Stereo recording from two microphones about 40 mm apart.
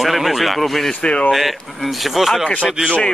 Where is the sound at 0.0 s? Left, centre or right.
Centre.